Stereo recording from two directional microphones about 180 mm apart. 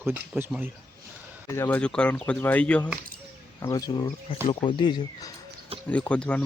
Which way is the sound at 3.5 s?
20° left (ahead or behind).